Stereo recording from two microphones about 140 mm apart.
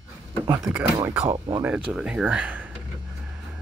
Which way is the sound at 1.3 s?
30° right (ahead or behind).